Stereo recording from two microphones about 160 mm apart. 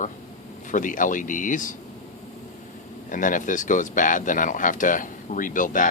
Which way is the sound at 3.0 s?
55° left (ahead or behind).